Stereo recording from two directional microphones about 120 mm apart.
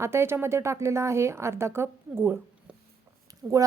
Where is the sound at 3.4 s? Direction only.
5° right (ahead or behind).